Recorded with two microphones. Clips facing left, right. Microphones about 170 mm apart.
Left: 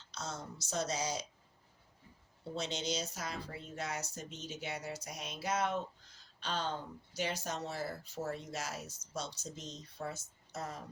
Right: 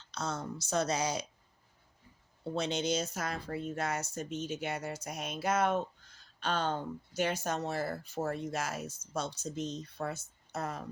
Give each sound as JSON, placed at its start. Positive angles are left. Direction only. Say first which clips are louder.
{"t": 0.1, "sound": "speech", "louder": "right 7 dB", "side_deg": -60}
{"t": 2.4, "sound": "speech", "louder": "right 6 dB", "side_deg": -55}